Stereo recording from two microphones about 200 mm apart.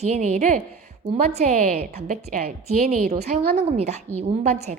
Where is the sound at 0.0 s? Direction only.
35° right (ahead or behind).